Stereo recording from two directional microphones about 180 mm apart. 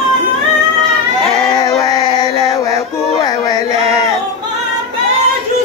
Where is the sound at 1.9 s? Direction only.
25° left (ahead or behind).